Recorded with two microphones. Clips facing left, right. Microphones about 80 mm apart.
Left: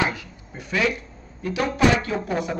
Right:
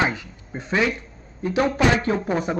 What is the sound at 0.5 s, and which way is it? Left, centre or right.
Speech, right.